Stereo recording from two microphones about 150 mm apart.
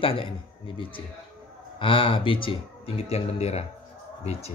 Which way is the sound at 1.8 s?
35° left (ahead or behind).